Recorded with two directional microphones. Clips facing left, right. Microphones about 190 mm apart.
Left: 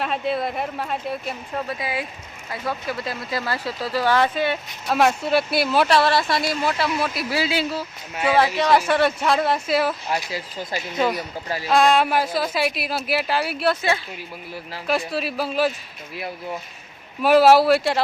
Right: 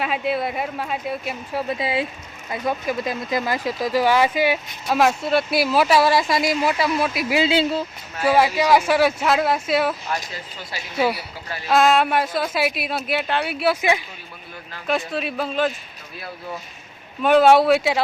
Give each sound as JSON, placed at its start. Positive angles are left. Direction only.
{"t": 0.0, "sound": "speech", "side_deg": 0}
{"t": 1.6, "sound": "speech", "side_deg": -25}
{"t": 6.7, "sound": "speech", "side_deg": 0}
{"t": 7.3, "sound": "speech", "side_deg": -20}
{"t": 8.2, "sound": "speech", "side_deg": -5}
{"t": 10.9, "sound": "speech", "side_deg": -10}
{"t": 14.8, "sound": "speech", "side_deg": 0}
{"t": 16.1, "sound": "speech", "side_deg": 25}
{"t": 17.2, "sound": "speech", "side_deg": 5}